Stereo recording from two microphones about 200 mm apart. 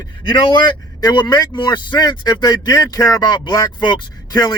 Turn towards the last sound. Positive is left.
turn(degrees=20)  # may be behind; listen again after turning